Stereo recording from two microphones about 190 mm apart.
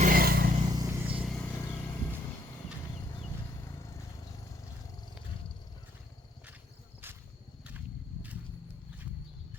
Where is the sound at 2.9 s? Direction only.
20° left (ahead or behind).